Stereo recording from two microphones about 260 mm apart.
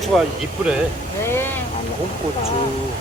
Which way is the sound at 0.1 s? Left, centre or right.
Centre.